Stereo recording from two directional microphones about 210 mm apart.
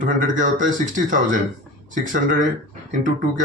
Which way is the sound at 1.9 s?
40° right (ahead or behind).